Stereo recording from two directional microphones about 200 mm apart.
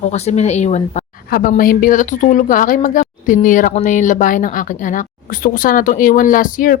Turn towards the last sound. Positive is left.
turn(degrees=45)  # may be behind; listen again after turning